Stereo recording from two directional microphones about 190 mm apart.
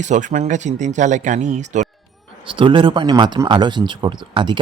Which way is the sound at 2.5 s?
25° right (ahead or behind).